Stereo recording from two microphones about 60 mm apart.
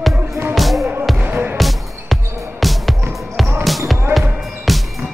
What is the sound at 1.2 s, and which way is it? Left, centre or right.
Music, right.